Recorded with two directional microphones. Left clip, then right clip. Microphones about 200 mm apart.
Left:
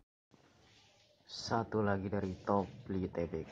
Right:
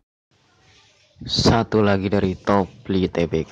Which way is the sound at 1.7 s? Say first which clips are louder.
Right 16 dB; 55° right (ahead or behind).